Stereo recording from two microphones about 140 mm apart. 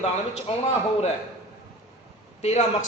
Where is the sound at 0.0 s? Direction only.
45° left (ahead or behind).